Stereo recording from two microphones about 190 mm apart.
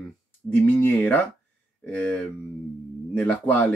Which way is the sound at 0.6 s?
10° left (ahead or behind).